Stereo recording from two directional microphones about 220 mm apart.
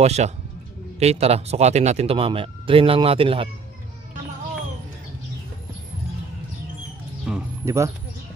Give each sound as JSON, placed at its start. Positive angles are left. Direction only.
{"t": 0.0, "sound": "speech", "side_deg": -30}
{"t": 7.2, "sound": "bird", "side_deg": -10}